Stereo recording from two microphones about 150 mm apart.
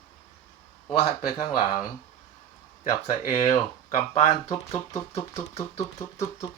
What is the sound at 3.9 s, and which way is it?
Speech, 50° left (ahead or behind).